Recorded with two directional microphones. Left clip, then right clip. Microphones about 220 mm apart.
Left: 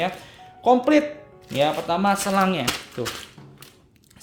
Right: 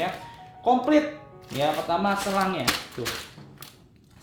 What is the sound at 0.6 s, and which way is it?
Speech, 55° left (ahead or behind).